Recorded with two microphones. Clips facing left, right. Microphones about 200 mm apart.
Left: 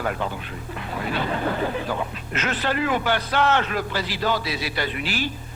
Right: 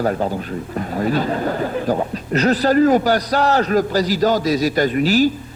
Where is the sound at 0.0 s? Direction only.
40° right (ahead or behind).